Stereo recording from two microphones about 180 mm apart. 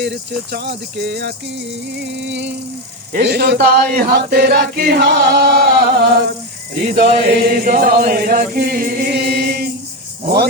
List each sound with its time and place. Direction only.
0.5 s speech: 65° right (ahead or behind)
3.1 s chant: 60° right (ahead or behind)